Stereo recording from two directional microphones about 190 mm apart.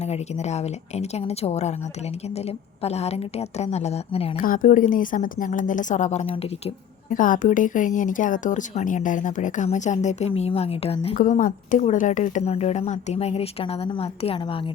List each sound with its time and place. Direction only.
0.0 s speech: 35° left (ahead or behind)
4.4 s a woman's voice: 45° left (ahead or behind)
7.1 s speech: 45° left (ahead or behind)
11.2 s speech: 45° left (ahead or behind); by 14.6 s 25° left (ahead or behind)